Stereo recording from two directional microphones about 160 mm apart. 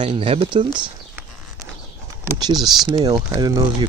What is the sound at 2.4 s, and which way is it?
Speech, 25° right (ahead or behind).